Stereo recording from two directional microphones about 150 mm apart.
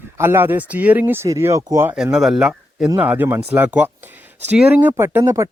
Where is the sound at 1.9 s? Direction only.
5° right (ahead or behind).